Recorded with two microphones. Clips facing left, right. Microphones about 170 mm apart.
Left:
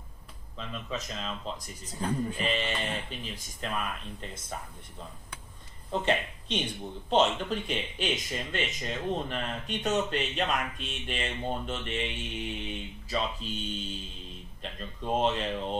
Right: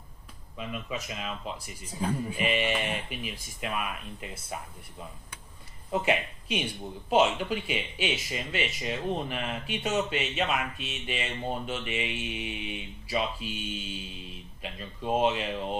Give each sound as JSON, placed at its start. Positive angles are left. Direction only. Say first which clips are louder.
{"t": 0.6, "sound": "speech", "louder": "right 1 dB", "side_deg": -10}
{"t": 5.9, "sound": "speech", "louder": "right 1 dB", "side_deg": -10}